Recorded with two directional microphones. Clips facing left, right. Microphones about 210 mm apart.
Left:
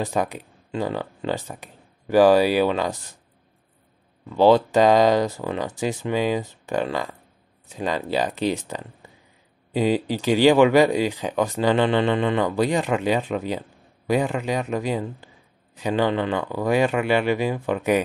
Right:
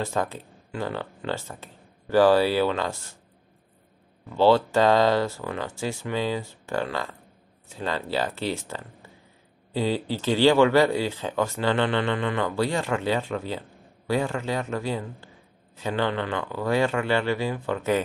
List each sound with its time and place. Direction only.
0.0 s speech: 15° left (ahead or behind)
4.4 s speech: 15° left (ahead or behind)